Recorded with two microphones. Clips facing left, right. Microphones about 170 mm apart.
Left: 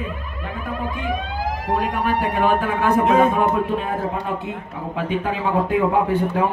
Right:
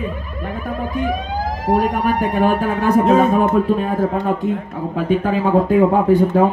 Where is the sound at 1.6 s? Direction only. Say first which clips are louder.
Right 6 dB; 40° right (ahead or behind).